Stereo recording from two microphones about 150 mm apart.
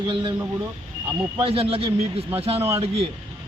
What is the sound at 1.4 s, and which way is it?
A man's voice, 40° right (ahead or behind).